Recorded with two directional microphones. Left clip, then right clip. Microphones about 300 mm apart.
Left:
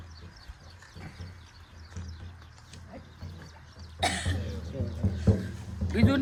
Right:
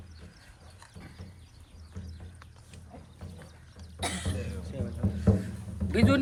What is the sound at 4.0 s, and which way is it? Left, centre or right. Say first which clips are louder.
Cough: left 6 dB; left.